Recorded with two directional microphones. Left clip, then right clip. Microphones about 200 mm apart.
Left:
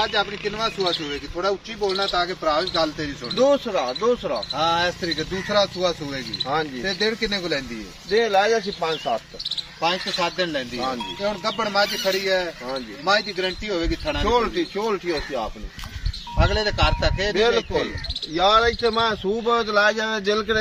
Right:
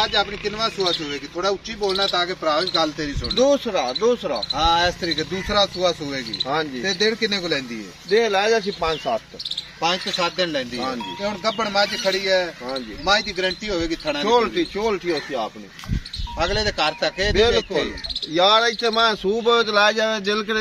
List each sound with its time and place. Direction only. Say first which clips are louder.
0.0 s speech: right 2 dB; 40° right (ahead or behind)
11.1 s speech: right 2 dB; 35° right (ahead or behind)